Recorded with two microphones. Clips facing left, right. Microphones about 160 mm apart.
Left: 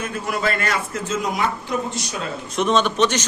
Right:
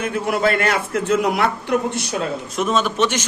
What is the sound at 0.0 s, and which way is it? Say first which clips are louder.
A man's voice: right 5 dB; 60° right (ahead or behind).